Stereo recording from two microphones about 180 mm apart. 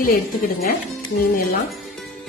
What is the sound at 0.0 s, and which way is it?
Speech, 55° left (ahead or behind).